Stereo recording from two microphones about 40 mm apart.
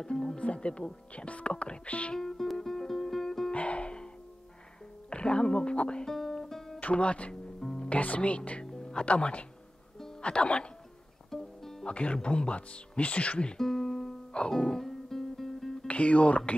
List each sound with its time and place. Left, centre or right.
0.4 s speech: left
2.1 s music: centre
3.5 s music: left
5.1 s speech: left
6.0 s music: centre
6.8 s speech: left
7.6 s music: centre
7.9 s speech: left
8.6 s music: centre
9.0 s speech: left
11.2 s music: centre
11.8 s speech: left
13.6 s music: centre
15.9 s speech: left